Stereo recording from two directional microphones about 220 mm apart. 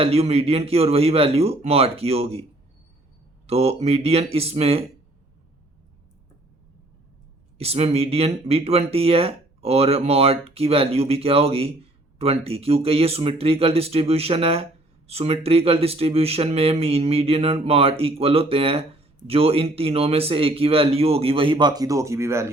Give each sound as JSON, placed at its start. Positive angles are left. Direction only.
{"t": 0.0, "sound": "speech", "side_deg": -25}
{"t": 3.4, "sound": "speech", "side_deg": -30}
{"t": 7.6, "sound": "speech", "side_deg": -25}